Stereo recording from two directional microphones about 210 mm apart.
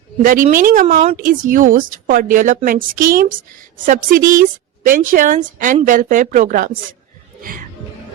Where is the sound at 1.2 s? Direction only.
40° right (ahead or behind).